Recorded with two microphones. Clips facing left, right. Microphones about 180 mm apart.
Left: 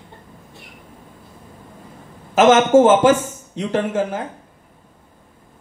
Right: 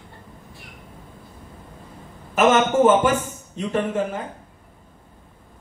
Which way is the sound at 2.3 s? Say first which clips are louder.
Left 6 dB; 90° left.